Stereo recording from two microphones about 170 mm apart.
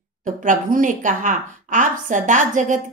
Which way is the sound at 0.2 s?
50° right (ahead or behind).